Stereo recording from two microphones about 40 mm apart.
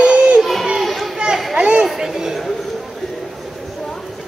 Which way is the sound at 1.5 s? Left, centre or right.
Right.